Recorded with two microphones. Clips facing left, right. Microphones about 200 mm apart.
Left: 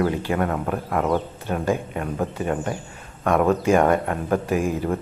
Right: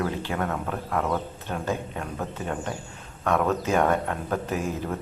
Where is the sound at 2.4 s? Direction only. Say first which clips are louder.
Left 6 dB; 55° left (ahead or behind).